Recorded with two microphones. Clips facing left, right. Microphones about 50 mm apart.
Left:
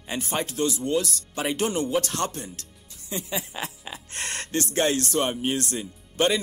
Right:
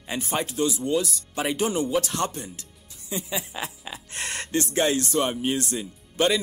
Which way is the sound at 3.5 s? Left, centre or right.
Centre.